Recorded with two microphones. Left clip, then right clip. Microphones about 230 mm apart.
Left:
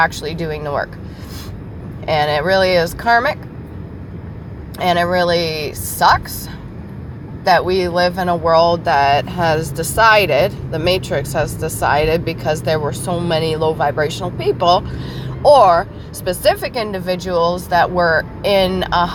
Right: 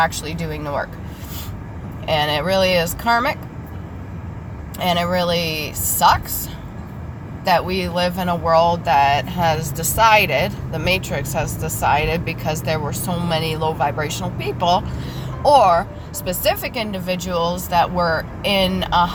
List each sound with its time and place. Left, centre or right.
0.1 s speech: left
2.2 s speech: left
4.8 s speech: left
7.4 s speech: left
16.5 s speech: left